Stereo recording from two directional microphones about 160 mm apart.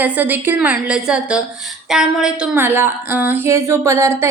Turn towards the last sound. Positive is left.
turn(degrees=-20)  # may be behind; listen again after turning